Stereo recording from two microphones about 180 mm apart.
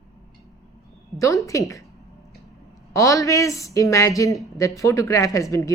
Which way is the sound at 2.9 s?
20° left (ahead or behind).